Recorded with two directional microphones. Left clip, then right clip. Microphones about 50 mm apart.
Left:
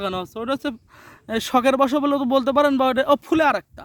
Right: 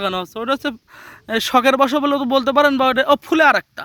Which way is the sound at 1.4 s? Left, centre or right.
Left.